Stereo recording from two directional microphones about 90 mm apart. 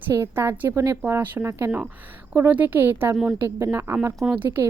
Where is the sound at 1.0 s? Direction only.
20° right (ahead or behind).